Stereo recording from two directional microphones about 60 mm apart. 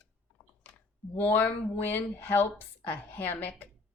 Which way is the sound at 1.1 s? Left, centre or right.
Left.